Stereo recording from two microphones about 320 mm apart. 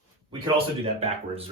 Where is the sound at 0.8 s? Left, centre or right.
Centre.